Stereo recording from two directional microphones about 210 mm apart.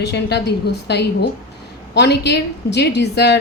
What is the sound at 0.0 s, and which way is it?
A woman's voice, 55° left (ahead or behind).